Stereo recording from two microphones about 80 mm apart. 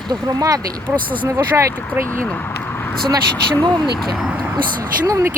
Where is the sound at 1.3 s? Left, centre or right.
Right.